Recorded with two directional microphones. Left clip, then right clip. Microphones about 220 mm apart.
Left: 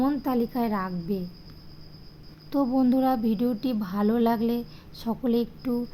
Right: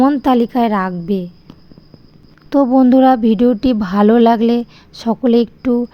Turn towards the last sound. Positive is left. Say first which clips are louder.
# right 13 dB
turn(degrees=-30)  # may be behind; listen again after turning